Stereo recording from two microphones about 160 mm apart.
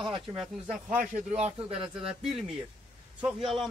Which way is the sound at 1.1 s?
40° right (ahead or behind).